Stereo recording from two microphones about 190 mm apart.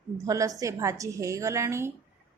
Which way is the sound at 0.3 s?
15° right (ahead or behind).